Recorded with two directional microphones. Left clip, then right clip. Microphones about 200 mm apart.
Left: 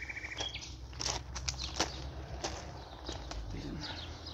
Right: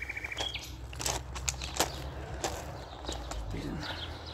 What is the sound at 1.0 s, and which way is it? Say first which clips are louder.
Biting: right 2 dB; 20° right (ahead or behind).